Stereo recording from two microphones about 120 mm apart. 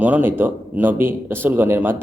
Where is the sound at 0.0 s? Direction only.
15° right (ahead or behind).